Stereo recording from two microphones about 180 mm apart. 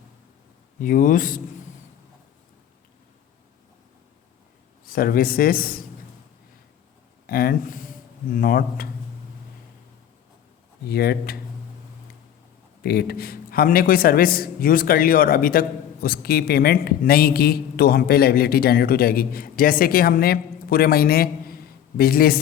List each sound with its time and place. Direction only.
0.8 s speech: 50° left (ahead or behind)
4.9 s speech: 55° left (ahead or behind)
7.3 s a man's voice: 55° left (ahead or behind)
10.8 s a man's voice: 60° left (ahead or behind)
12.8 s a man's voice: 60° left (ahead or behind)